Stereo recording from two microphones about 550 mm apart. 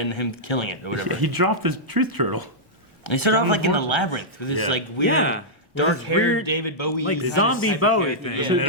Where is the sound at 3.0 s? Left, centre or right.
Left.